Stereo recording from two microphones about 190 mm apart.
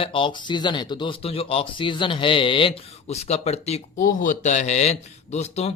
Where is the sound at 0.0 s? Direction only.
25° left (ahead or behind).